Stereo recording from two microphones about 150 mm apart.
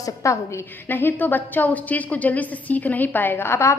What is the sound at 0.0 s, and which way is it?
A woman's voice, 20° left (ahead or behind).